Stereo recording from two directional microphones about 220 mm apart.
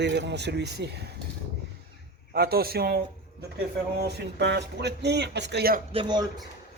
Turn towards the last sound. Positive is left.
turn(degrees=-20)  # may be behind; listen again after turning